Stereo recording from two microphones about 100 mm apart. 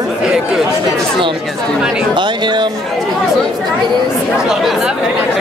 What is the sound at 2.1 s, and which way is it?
Speech, 50° right (ahead or behind).